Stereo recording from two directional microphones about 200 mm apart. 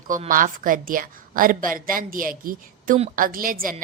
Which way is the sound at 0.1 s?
40° right (ahead or behind).